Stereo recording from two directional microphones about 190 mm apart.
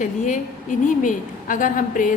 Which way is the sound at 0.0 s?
40° left (ahead or behind).